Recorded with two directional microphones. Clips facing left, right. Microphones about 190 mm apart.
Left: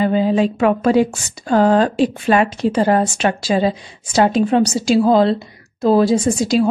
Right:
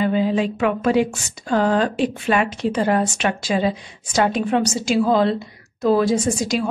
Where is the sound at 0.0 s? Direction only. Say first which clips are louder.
Left 4 dB; 35° left (ahead or behind).